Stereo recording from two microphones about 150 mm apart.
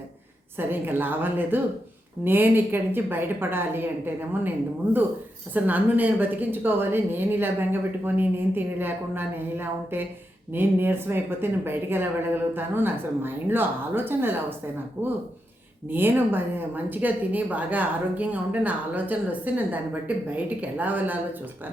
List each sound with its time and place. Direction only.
0.5 s a woman's voice: 15° right (ahead or behind)
5.5 s a woman's voice: 10° right (ahead or behind)